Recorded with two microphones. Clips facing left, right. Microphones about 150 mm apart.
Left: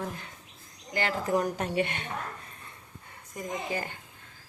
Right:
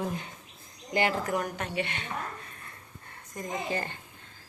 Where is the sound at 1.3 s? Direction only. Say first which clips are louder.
Left 4 dB; 35° left (ahead or behind).